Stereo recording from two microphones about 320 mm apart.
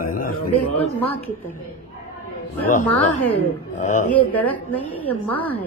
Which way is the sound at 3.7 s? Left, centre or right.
Left.